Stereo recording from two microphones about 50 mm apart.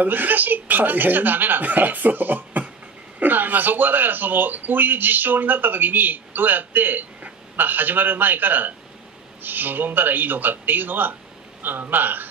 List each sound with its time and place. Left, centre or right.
0.0 s speech: right